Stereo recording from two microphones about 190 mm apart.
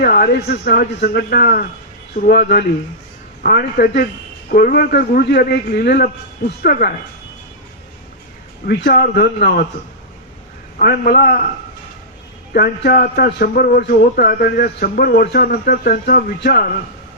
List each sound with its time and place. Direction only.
0.0 s speech: 55° left (ahead or behind)
8.6 s speech: 55° left (ahead or behind)
10.8 s speech: 50° left (ahead or behind)
12.5 s speech: 50° left (ahead or behind)